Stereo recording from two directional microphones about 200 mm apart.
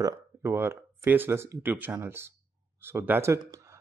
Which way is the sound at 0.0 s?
10° right (ahead or behind).